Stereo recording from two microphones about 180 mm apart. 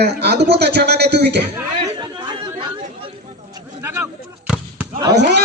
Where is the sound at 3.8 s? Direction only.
10° right (ahead or behind).